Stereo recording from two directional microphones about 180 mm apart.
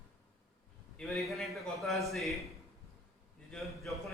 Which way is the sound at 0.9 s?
Centre (ahead or behind).